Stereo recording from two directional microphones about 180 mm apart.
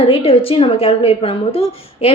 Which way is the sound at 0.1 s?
30° left (ahead or behind).